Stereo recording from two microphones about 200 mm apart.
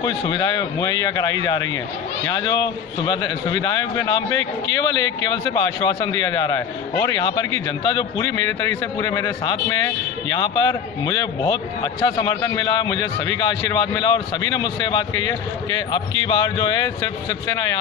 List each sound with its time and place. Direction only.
0.0 s a man's voice: 20° left (ahead or behind)